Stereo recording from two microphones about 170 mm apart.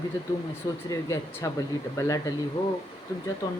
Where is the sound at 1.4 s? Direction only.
20° left (ahead or behind).